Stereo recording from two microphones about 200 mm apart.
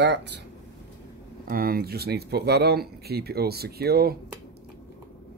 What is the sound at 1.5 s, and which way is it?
Speech, 45° right (ahead or behind).